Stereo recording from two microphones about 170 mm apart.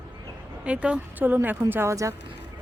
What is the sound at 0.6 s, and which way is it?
Speech, 5° right (ahead or behind).